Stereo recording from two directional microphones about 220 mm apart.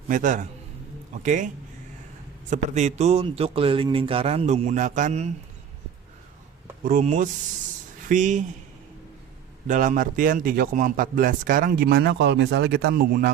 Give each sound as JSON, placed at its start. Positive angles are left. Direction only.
{"t": 0.1, "sound": "a man's voice", "side_deg": -35}
{"t": 2.5, "sound": "speech", "side_deg": -35}
{"t": 6.8, "sound": "a man's voice", "side_deg": -35}
{"t": 9.6, "sound": "a man's voice", "side_deg": -35}